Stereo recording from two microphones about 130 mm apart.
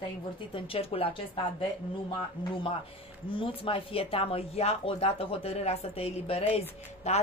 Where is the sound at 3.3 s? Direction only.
40° left (ahead or behind).